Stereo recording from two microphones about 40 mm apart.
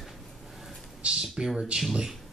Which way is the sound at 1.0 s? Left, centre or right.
Right.